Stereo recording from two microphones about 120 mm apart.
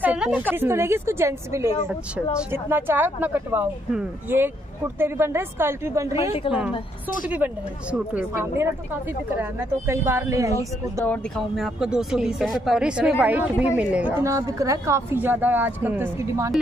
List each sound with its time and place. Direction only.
0.0 s speech: 10° right (ahead or behind)
6.4 s a woman's voice: 45° left (ahead or behind)
7.2 s a woman's voice: 10° right (ahead or behind)
11.1 s a woman's voice: centre (ahead or behind); by 16.5 s 25° right (ahead or behind)